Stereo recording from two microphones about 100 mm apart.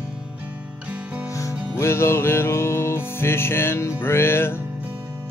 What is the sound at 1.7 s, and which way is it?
Music, 25° left (ahead or behind).